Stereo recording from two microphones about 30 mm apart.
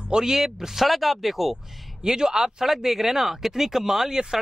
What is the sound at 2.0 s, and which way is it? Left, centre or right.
Speech, centre.